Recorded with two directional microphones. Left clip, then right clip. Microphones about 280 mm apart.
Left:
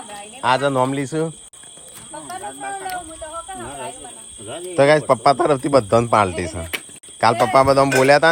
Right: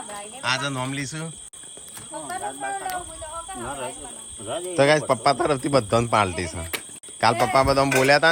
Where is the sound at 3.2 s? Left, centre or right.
Left.